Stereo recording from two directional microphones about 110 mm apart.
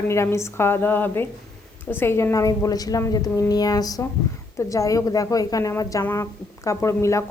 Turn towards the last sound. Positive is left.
turn(degrees=25)  # may be behind; listen again after turning